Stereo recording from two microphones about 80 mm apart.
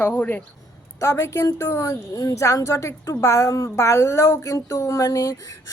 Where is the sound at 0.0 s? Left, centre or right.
Left.